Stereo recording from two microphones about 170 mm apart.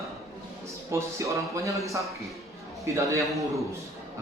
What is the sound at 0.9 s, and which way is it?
Speech, 15° right (ahead or behind).